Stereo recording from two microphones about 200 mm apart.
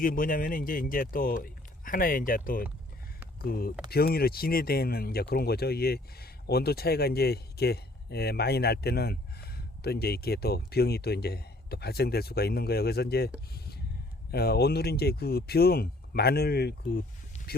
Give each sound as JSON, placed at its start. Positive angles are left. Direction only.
{"t": 0.0, "sound": "speech", "side_deg": 45}